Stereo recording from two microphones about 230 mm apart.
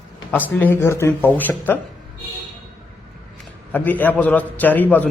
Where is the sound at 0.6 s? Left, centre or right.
Centre.